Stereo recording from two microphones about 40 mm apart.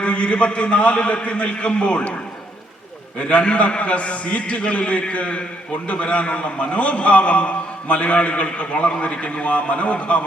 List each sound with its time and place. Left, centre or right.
0.0 s a man's voice: left
3.2 s a man's voice: left